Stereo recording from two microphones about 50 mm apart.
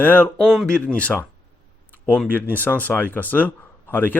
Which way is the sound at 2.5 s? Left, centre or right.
Left.